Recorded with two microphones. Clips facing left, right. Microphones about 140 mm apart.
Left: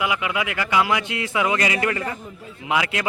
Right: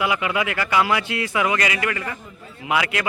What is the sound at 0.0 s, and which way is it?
A man's voice, 10° left (ahead or behind).